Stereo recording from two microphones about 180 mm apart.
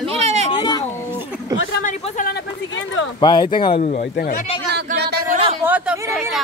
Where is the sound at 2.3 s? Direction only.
90° left.